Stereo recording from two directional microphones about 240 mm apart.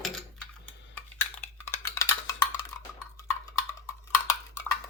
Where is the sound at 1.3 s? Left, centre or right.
Centre.